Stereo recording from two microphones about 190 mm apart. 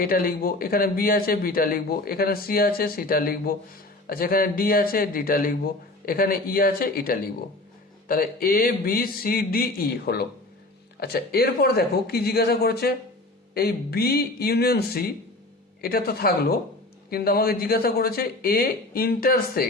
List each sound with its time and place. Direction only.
0.0 s speech: 50° left (ahead or behind)